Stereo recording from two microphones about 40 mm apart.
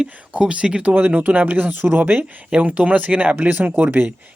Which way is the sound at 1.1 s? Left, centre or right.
Right.